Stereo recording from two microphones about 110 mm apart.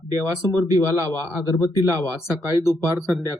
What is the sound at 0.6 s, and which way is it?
Speech, 35° right (ahead or behind).